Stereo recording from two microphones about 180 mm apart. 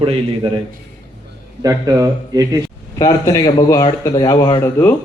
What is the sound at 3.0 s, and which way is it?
Speech, 20° left (ahead or behind).